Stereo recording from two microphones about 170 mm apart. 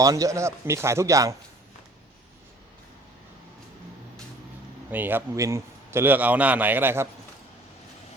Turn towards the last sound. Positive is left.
turn(degrees=-15)  # may be behind; listen again after turning